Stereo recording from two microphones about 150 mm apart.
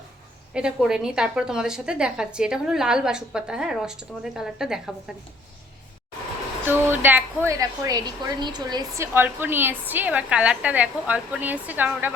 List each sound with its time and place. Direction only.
0.5 s a woman's voice: 5° right (ahead or behind)
6.7 s a woman's voice: 15° right (ahead or behind)
9.1 s a woman's voice: 15° right (ahead or behind)